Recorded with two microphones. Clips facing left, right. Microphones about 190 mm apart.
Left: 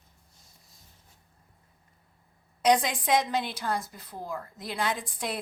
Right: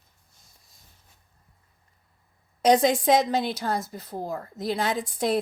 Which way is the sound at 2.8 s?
40° right (ahead or behind).